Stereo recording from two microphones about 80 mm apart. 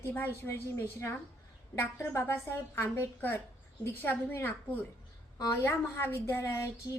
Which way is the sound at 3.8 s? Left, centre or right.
Left.